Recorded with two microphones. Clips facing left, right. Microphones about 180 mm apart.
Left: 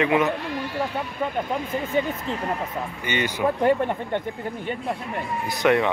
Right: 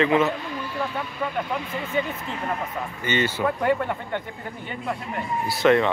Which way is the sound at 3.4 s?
25° left (ahead or behind).